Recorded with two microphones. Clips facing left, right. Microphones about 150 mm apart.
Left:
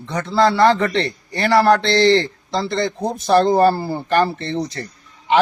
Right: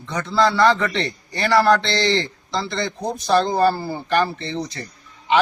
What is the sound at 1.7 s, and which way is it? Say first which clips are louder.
Speech: left 3 dB; 50° left (ahead or behind).